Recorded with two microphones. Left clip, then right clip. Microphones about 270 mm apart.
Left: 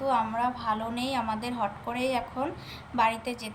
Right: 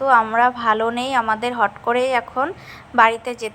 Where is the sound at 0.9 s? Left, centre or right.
Centre.